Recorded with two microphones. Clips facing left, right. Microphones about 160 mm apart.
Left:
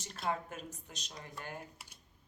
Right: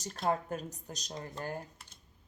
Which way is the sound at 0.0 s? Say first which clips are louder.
Right 5 dB; 40° right (ahead or behind).